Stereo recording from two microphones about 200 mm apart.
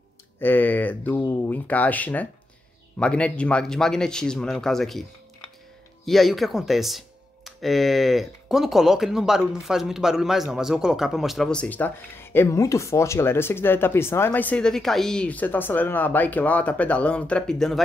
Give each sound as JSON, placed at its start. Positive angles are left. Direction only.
{"t": 0.4, "sound": "a man's voice", "side_deg": 10}
{"t": 6.0, "sound": "a man's voice", "side_deg": 0}